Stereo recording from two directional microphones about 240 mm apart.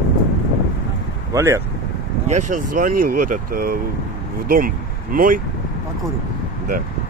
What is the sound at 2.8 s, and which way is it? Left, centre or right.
Speech, right.